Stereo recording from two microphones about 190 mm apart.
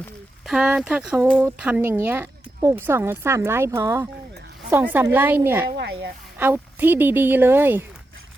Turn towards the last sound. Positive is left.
turn(degrees=-10)  # may be behind; listen again after turning